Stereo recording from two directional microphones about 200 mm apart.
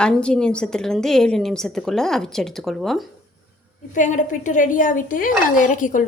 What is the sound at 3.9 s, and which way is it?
A woman's voice, 40° left (ahead or behind).